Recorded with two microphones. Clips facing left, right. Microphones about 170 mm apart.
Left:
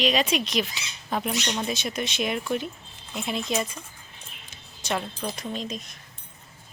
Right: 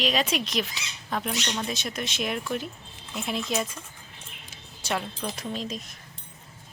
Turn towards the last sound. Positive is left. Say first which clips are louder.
# even
turn(degrees=0)  # may be behind; listen again after turning